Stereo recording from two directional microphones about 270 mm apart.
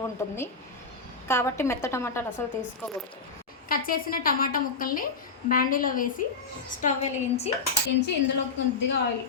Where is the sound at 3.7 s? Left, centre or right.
Left.